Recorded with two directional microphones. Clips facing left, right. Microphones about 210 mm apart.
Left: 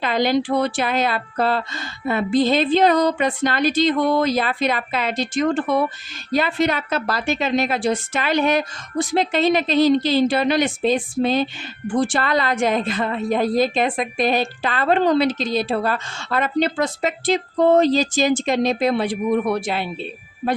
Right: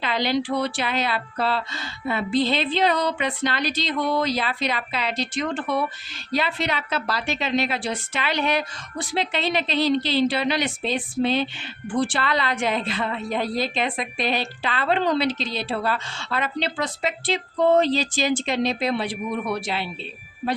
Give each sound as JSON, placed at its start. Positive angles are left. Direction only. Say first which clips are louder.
{"t": 0.0, "sound": "a woman's voice", "louder": "left 5 dB", "side_deg": 45}